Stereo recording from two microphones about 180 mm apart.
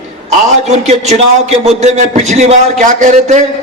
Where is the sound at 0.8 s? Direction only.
40° right (ahead or behind).